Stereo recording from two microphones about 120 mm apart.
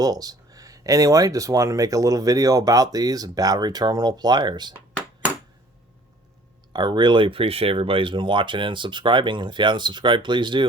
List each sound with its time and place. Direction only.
0.0 s speech: 30° right (ahead or behind)
6.7 s speech: 40° right (ahead or behind)